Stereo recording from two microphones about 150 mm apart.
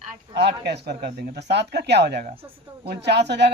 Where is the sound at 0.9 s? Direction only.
90° right.